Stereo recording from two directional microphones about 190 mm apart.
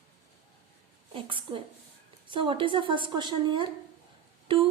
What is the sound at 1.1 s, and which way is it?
A woman's voice, 25° right (ahead or behind).